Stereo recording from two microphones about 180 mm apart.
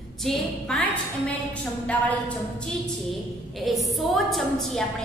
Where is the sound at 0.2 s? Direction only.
Centre (ahead or behind).